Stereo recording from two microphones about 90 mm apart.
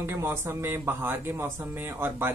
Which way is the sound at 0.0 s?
25° right (ahead or behind).